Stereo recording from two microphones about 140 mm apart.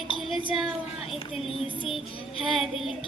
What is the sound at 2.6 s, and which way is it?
Speech, centre (ahead or behind).